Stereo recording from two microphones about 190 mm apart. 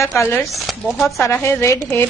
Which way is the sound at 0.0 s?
15° left (ahead or behind).